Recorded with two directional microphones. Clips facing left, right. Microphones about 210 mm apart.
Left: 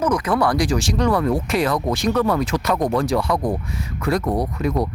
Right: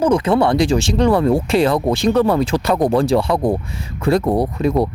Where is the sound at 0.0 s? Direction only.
25° right (ahead or behind).